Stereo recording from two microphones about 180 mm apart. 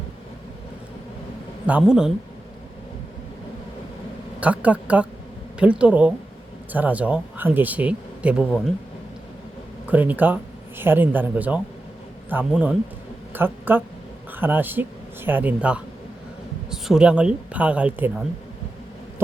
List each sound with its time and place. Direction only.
1.6 s speech: 5° right (ahead or behind)
4.4 s speech: 10° right (ahead or behind)
9.8 s speech: 10° right (ahead or behind)